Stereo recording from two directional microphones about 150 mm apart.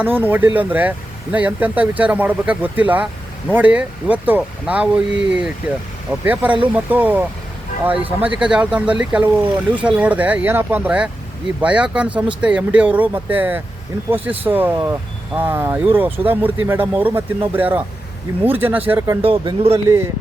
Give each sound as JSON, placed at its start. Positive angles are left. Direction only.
{"t": 0.0, "sound": "speech", "side_deg": -15}
{"t": 19.2, "sound": "speech", "side_deg": -40}
{"t": 19.7, "sound": "speech", "side_deg": -20}